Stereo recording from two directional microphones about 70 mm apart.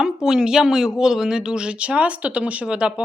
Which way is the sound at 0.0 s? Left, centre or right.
Centre.